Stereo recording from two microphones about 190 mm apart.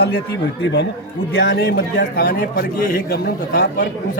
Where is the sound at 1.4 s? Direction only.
55° left (ahead or behind).